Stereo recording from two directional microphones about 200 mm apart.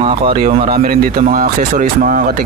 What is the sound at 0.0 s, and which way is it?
Speech, 30° right (ahead or behind).